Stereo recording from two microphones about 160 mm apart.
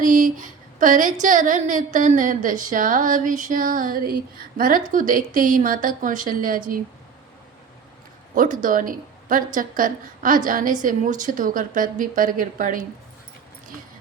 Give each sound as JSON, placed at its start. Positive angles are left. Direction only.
{"t": 0.0, "sound": "a sound", "side_deg": -55}
{"t": 1.2, "sound": "a woman's voice", "side_deg": -55}
{"t": 8.4, "sound": "a woman's voice", "side_deg": -55}